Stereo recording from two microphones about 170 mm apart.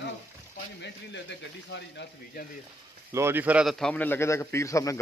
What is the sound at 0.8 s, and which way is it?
Speech, 90° left.